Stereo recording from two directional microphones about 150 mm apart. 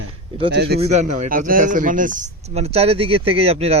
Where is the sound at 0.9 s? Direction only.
55° right (ahead or behind).